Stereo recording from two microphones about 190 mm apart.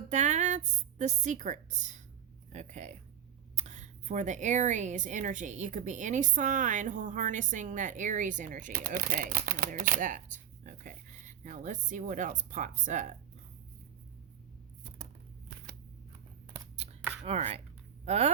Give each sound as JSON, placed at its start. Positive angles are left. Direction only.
{"t": 0.1, "sound": "a woman's voice", "side_deg": -40}
{"t": 17.2, "sound": "speech", "side_deg": -30}